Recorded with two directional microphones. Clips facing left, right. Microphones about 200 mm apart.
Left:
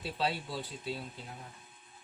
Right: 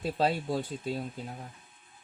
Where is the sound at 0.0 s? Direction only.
45° right (ahead or behind).